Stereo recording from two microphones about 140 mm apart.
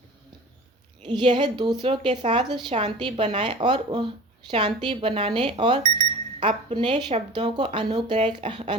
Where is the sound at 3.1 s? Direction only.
50° right (ahead or behind).